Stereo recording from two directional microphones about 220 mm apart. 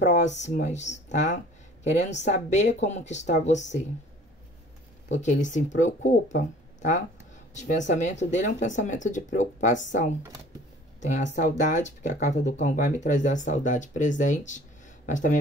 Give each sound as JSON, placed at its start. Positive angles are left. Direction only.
{"t": 0.0, "sound": "speech", "side_deg": 30}
{"t": 5.1, "sound": "a woman's voice", "side_deg": 35}